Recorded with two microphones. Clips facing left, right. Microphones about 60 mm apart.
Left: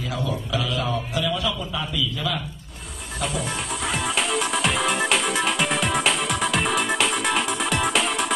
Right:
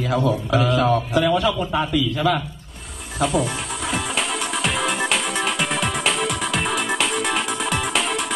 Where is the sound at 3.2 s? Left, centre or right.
Centre.